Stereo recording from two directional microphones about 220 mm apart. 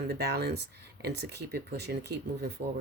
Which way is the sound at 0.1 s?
50° right (ahead or behind).